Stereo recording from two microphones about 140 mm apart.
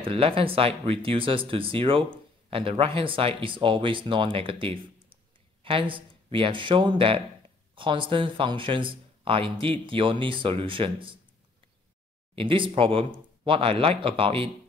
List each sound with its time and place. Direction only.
0.0 s speech: 40° right (ahead or behind)
12.4 s speech: 40° right (ahead or behind)